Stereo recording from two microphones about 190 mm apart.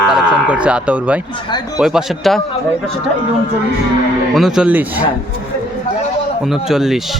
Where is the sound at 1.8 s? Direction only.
Centre (ahead or behind).